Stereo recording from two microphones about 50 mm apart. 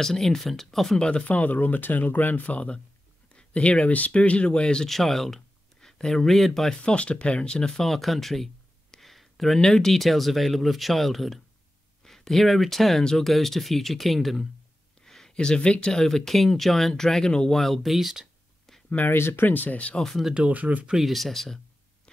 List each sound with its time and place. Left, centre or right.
0.0 s speech: centre
1.2 s speech: left
4.8 s speech: centre
6.8 s speech: left; by 8.5 s centre
8.9 s a sound: centre
9.6 s speech: centre
15.0 s speech: centre
17.6 s speech: centre
18.7 s a sound: centre
19.0 s speech: left
20.0 s speech: centre
20.3 s speech: right
21.0 s speech: centre